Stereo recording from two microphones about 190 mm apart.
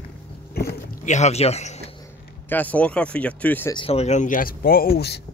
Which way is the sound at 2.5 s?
10° left (ahead or behind).